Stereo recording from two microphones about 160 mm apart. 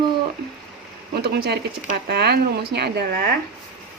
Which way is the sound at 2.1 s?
90° right.